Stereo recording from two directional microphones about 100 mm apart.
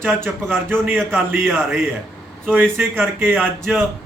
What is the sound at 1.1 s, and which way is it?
A man's voice, 20° right (ahead or behind).